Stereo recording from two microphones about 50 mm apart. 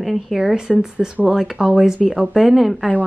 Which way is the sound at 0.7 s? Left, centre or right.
Right.